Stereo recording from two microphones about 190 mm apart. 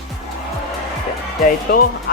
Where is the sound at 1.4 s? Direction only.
50° left (ahead or behind).